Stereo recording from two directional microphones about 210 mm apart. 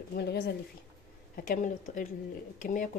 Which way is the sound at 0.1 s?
50° left (ahead or behind).